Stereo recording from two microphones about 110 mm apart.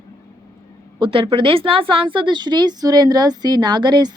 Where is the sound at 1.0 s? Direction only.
50° right (ahead or behind).